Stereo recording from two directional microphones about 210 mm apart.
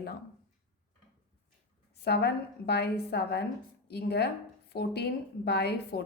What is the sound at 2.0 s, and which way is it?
A woman's voice, 50° left (ahead or behind).